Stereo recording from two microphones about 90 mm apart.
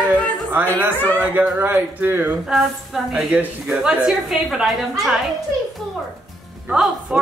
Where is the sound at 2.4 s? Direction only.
Centre (ahead or behind).